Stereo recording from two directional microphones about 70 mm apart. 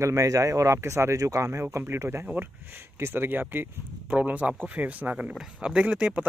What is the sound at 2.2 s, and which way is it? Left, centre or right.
Speech, right.